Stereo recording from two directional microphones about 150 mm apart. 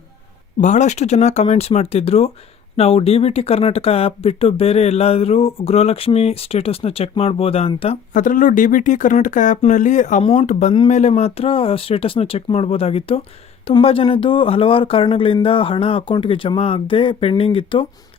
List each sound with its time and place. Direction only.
0.6 s speech: 55° left (ahead or behind)
8.1 s speech: 60° left (ahead or behind); by 17.8 s 35° left (ahead or behind)